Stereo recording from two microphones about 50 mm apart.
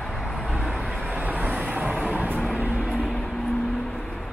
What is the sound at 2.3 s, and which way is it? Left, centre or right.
Music, left.